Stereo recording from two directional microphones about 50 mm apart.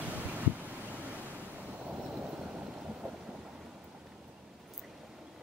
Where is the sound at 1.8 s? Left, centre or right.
Right.